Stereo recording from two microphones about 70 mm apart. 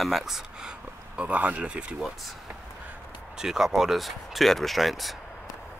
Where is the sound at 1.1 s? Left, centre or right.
Right.